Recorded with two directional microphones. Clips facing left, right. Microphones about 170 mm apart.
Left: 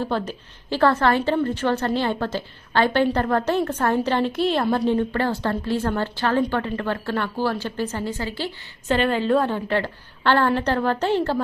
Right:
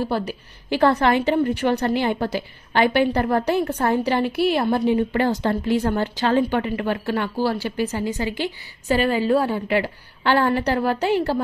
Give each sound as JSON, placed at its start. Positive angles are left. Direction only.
{"t": 0.3, "sound": "a woman's voice", "side_deg": -15}